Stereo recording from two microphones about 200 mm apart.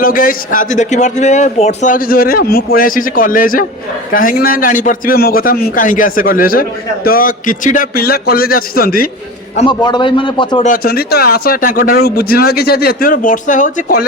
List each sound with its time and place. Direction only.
0.0 s a man's voice: 45° left (ahead or behind)
9.6 s a man's voice: 20° left (ahead or behind)
10.6 s a man's voice: 45° left (ahead or behind)